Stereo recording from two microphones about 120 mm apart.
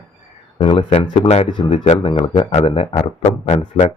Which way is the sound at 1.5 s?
40° left (ahead or behind).